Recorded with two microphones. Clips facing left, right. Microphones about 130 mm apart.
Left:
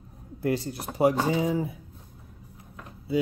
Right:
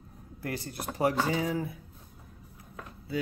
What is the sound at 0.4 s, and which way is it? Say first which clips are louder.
Speech: left 8 dB; 20° left (ahead or behind).